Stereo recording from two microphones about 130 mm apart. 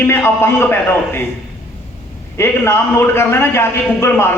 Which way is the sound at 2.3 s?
20° left (ahead or behind).